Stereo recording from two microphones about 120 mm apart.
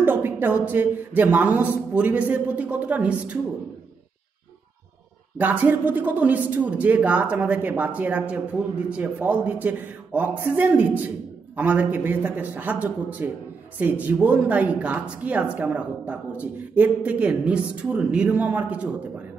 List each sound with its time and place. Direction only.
0.0 s speech: 15° right (ahead or behind)
5.4 s speech: 15° right (ahead or behind)